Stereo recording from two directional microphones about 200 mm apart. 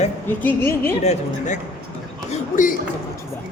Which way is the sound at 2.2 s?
35° left (ahead or behind).